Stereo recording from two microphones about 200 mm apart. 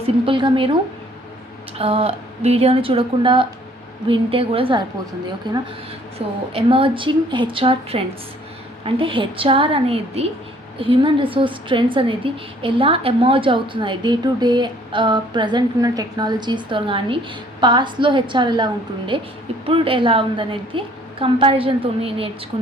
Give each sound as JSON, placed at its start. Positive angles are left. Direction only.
{"t": 0.0, "sound": "a woman's voice", "side_deg": -25}
{"t": 1.8, "sound": "a woman's voice", "side_deg": -30}